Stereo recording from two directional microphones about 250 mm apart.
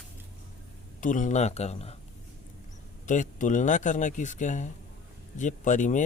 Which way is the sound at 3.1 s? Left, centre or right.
Left.